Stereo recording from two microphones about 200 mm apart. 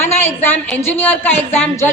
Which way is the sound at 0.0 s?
10° left (ahead or behind).